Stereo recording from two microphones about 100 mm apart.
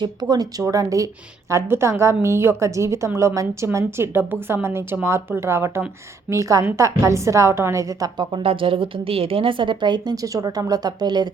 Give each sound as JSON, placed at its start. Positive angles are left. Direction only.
{"t": 0.0, "sound": "a woman's voice", "side_deg": -40}
{"t": 8.3, "sound": "a woman's voice", "side_deg": -65}
{"t": 10.3, "sound": "a woman's voice", "side_deg": -35}